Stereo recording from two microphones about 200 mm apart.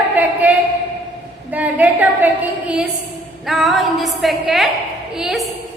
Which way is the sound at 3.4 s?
Centre (ahead or behind).